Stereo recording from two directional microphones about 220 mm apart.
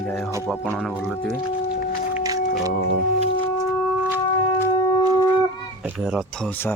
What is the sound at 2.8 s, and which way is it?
Speech, 35° right (ahead or behind).